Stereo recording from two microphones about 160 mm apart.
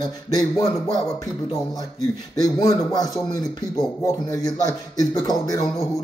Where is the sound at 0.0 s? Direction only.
25° left (ahead or behind).